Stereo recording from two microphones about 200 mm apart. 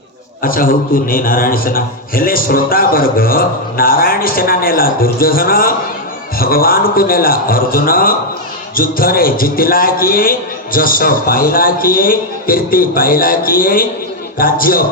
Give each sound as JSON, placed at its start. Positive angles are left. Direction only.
{"t": 0.4, "sound": "a man's voice", "side_deg": 45}